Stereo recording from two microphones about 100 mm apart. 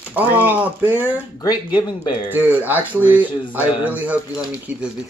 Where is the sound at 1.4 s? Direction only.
40° left (ahead or behind).